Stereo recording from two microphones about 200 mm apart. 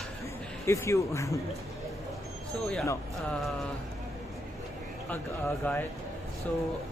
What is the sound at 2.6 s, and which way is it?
Speech, centre (ahead or behind).